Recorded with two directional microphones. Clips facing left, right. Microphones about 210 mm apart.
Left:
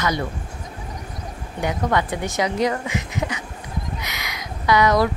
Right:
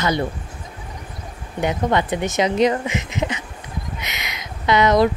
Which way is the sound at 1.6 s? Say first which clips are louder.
Right 2 dB; 25° right (ahead or behind).